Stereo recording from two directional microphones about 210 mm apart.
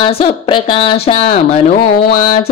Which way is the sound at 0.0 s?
25° left (ahead or behind).